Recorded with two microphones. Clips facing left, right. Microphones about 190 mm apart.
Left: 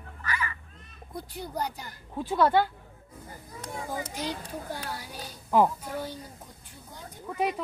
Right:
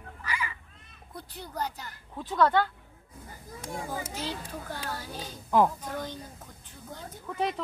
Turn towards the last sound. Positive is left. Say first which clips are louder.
# left 2 dB
turn(degrees=10)  # may be behind; listen again after turning